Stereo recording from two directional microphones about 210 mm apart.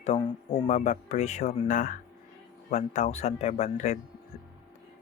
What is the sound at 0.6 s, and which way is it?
Speech, 35° left (ahead or behind).